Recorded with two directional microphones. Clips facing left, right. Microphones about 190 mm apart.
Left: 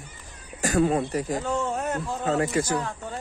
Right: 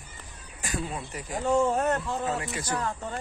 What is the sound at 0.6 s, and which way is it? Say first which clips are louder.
Speech: left 12 dB; 50° left (ahead or behind).